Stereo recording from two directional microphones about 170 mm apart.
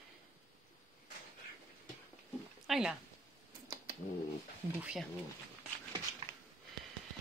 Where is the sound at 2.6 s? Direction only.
Centre (ahead or behind).